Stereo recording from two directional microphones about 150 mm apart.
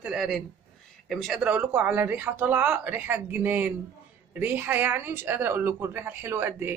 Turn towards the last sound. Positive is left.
turn(degrees=-15)  # may be behind; listen again after turning